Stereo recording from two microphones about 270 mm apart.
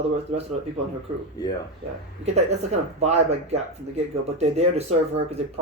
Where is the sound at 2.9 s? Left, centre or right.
Right.